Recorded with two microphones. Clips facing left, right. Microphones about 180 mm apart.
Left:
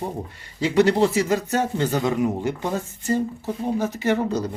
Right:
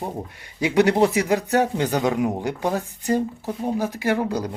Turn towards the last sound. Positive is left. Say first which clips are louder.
# left 1 dB
turn(degrees=-10)  # may be behind; listen again after turning